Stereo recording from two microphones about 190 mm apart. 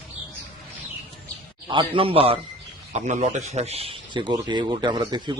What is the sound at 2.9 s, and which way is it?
A man's voice, 40° right (ahead or behind).